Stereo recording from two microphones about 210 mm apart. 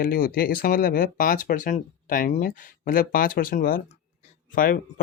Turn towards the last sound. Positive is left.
turn(degrees=40)  # may be behind; listen again after turning